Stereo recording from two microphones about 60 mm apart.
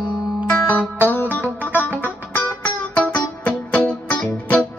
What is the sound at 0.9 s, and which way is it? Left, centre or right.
Music, left.